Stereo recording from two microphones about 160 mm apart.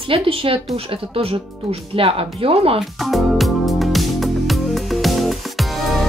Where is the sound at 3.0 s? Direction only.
Centre (ahead or behind).